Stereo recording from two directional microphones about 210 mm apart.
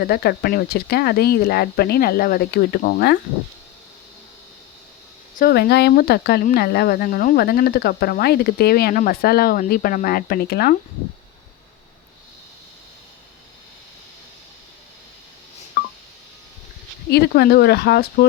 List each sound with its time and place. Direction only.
0.0 s speech: 45° left (ahead or behind)
5.4 s speech: 50° left (ahead or behind)
17.1 s speech: 50° left (ahead or behind)